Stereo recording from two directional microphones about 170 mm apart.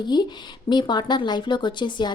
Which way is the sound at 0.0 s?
25° left (ahead or behind).